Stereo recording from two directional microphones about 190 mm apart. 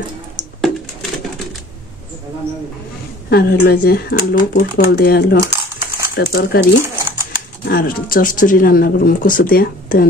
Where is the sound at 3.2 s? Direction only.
55° left (ahead or behind).